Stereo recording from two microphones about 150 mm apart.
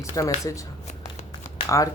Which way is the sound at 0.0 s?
20° left (ahead or behind).